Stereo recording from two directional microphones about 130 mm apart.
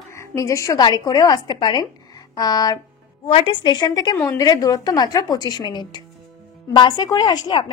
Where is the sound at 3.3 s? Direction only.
45° left (ahead or behind).